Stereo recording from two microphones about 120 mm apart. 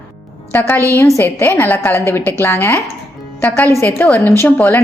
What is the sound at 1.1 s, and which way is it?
A woman's voice, 20° left (ahead or behind).